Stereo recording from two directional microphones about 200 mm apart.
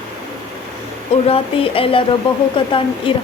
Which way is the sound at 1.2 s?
30° left (ahead or behind).